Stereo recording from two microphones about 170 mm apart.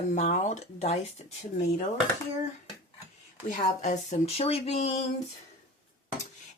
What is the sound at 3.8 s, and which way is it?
Speech, 45° left (ahead or behind).